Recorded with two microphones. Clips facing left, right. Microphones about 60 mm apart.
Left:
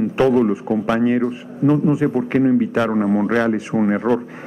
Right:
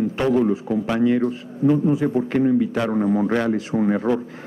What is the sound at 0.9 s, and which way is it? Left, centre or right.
Speech, left.